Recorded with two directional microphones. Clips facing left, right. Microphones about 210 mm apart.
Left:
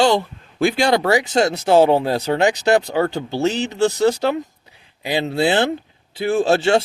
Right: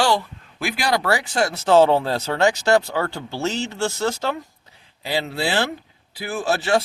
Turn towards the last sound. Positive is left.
turn(degrees=25)  # may be behind; listen again after turning